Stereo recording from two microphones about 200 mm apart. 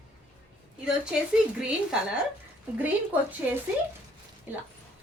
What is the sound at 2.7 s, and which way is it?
A woman's voice, 10° right (ahead or behind).